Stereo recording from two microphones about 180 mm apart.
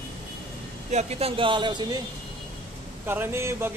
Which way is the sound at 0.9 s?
35° right (ahead or behind).